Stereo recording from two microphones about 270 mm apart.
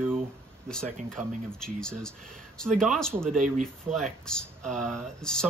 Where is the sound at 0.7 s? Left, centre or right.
Centre.